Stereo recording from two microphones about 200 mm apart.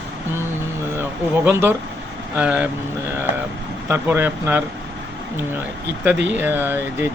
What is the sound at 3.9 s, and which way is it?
Speech, 10° right (ahead or behind).